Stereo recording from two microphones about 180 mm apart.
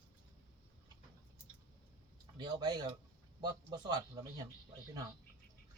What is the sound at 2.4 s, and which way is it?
A man's voice, 20° right (ahead or behind).